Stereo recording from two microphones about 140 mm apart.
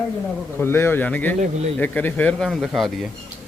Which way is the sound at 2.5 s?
Centre (ahead or behind).